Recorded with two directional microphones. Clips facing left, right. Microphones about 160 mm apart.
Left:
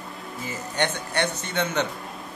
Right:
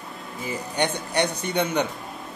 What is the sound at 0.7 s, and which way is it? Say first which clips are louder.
A man's voice: right 2 dB; 15° right (ahead or behind).